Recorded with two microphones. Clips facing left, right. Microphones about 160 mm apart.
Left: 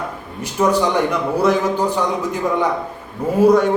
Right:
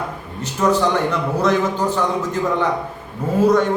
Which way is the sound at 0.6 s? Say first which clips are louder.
Left 1 dB; 10° left (ahead or behind).